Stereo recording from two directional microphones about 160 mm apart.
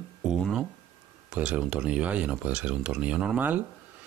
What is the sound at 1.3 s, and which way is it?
Speech, 5° right (ahead or behind).